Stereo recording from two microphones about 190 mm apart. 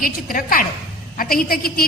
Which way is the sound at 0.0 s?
45° left (ahead or behind).